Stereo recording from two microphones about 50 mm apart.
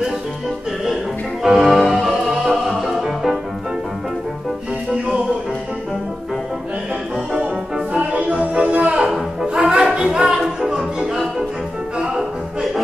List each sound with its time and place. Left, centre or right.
1.4 s music: centre
7.3 s music: centre
8.1 s music: right